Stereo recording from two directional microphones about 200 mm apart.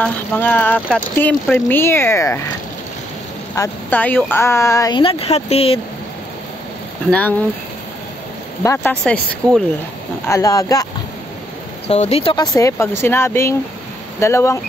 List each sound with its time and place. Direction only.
0.0 s speech: 10° left (ahead or behind)
3.5 s speech: 10° left (ahead or behind); by 5.8 s 30° left (ahead or behind)
7.1 s speech: 10° left (ahead or behind)
8.6 s speech: 10° left (ahead or behind)
10.2 s speech: 15° left (ahead or behind)
11.9 s speech: 30° left (ahead or behind)
12.5 s speech: 15° left (ahead or behind)